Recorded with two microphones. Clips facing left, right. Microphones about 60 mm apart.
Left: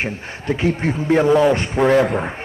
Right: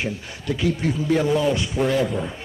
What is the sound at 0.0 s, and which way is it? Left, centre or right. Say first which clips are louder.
A man's voice: left 3 dB; left.